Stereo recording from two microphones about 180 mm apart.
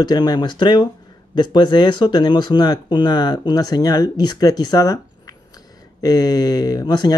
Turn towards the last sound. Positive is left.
turn(degrees=20)  # may be behind; listen again after turning